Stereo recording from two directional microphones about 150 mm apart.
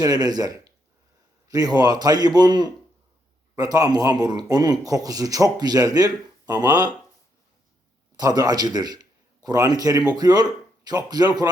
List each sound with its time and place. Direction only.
0.0 s speech: 25° right (ahead or behind)
8.1 s a man's voice: 25° right (ahead or behind)